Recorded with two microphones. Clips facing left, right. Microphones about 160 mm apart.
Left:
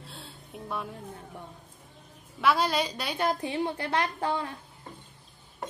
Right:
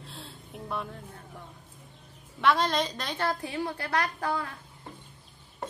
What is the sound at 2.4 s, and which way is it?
A woman's voice, 10° left (ahead or behind).